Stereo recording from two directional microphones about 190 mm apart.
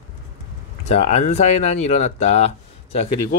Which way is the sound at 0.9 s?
35° left (ahead or behind).